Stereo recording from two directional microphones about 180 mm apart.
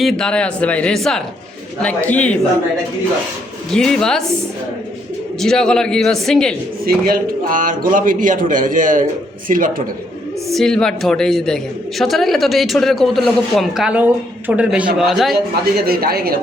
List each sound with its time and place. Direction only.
0.0 s a man's voice: 5° left (ahead or behind)
3.7 s a man's voice: centre (ahead or behind)
5.4 s a man's voice: 5° left (ahead or behind)
6.8 s a man's voice: 55° right (ahead or behind)
10.5 s a man's voice: 5° left (ahead or behind)
15.9 s speech: 60° right (ahead or behind)